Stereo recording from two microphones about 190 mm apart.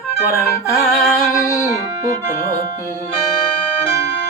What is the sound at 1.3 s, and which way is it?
Music, 15° left (ahead or behind).